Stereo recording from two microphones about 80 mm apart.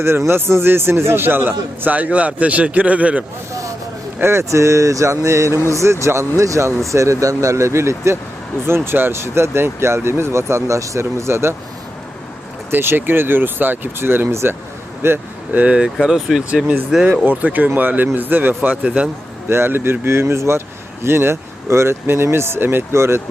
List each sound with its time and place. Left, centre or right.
0.0 s speech: right; by 3.2 s centre
4.2 s speech: right
12.7 s speech: right
15.6 s speech: centre
17.2 s speech: right
19.5 s speech: right